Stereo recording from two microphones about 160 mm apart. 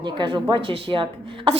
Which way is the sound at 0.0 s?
30° right (ahead or behind).